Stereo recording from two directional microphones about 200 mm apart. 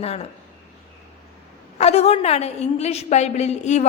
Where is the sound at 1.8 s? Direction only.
30° left (ahead or behind).